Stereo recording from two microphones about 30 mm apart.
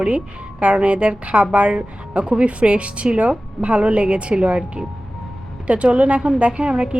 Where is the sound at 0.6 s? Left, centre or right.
Right.